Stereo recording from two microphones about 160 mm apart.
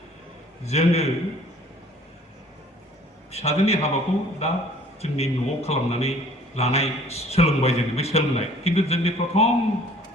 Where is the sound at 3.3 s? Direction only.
40° left (ahead or behind).